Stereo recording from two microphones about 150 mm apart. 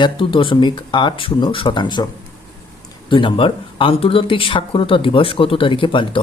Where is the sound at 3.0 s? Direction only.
35° left (ahead or behind).